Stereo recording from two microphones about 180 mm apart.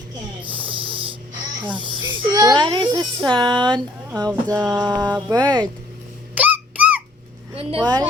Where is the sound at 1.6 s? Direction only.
25° right (ahead or behind).